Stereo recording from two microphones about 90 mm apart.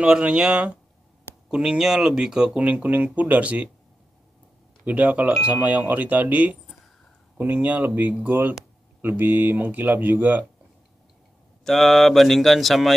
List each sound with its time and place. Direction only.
0.0 s speech: 10° right (ahead or behind)
4.8 s speech: 15° right (ahead or behind)
11.6 s speech: 5° left (ahead or behind)